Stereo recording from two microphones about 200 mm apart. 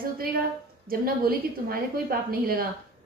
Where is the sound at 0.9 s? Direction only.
50° right (ahead or behind).